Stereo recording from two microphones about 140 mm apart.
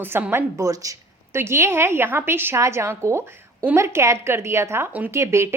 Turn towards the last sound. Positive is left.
turn(degrees=-20)  # may be behind; listen again after turning